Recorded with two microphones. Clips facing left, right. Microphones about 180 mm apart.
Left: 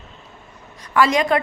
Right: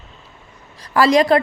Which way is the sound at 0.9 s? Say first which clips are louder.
Right 4 dB; 35° right (ahead or behind).